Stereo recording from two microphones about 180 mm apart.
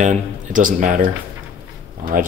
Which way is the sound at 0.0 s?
45° right (ahead or behind).